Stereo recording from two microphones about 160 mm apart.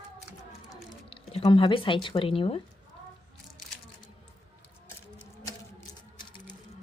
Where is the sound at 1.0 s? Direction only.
35° left (ahead or behind).